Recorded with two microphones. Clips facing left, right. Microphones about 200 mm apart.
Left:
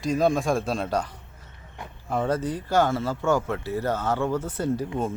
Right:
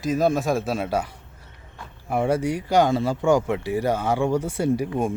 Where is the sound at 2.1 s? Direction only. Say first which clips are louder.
Right 3 dB; 10° right (ahead or behind).